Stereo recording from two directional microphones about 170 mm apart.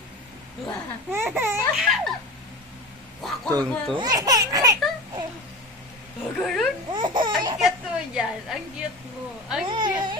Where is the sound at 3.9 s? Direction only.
20° right (ahead or behind).